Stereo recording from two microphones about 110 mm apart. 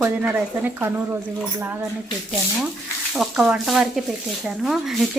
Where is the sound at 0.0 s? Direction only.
15° right (ahead or behind).